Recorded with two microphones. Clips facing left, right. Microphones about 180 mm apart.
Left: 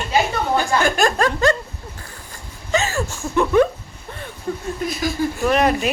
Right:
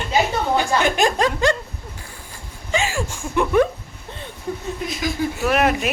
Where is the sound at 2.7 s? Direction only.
10° right (ahead or behind).